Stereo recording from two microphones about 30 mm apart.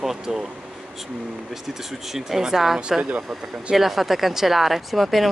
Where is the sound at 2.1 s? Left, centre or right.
Centre.